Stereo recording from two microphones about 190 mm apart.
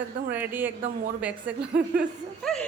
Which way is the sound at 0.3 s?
10° right (ahead or behind).